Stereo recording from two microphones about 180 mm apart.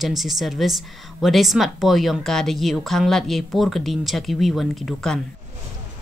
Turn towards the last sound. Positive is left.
turn(degrees=0)  # may be behind; listen again after turning